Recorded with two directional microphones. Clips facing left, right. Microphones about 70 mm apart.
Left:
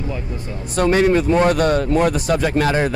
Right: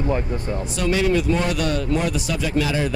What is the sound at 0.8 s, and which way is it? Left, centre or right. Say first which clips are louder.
A man's voice: left 6 dB; left.